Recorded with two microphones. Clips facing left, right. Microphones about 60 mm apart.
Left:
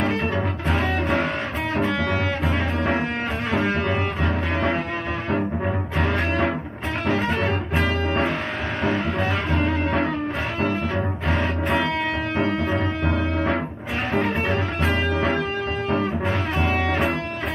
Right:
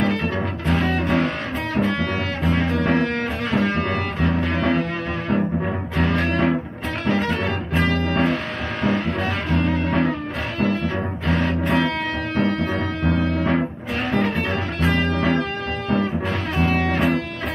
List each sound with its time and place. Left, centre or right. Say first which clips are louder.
0.2 s music: even; centre
2.8 s double bass: right 3 dB; centre
3.5 s music: right 1 dB; centre
5.9 s music: right 2 dB; centre
7.9 s music: right 4 dB; centre
8.8 s music: right 1 dB; centre
11.6 s music: right 1 dB; centre
16.5 s music: right 4 dB; centre